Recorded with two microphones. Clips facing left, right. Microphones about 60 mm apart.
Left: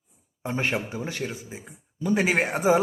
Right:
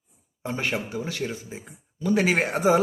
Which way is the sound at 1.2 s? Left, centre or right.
Centre.